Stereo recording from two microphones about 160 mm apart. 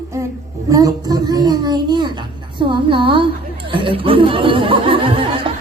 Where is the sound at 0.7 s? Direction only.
20° right (ahead or behind).